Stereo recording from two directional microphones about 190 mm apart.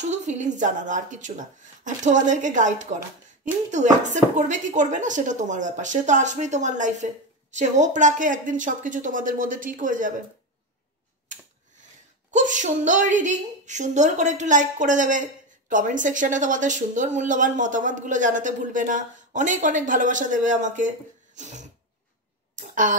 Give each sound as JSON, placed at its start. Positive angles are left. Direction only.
{"t": 0.1, "sound": "speech", "side_deg": -40}
{"t": 12.3, "sound": "speech", "side_deg": -40}
{"t": 22.6, "sound": "throat clearing", "side_deg": -40}